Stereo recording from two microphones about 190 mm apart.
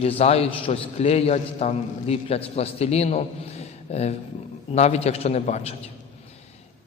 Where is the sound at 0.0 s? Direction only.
30° left (ahead or behind).